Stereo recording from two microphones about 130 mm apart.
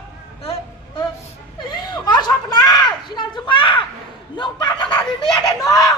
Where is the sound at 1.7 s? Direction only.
35° left (ahead or behind).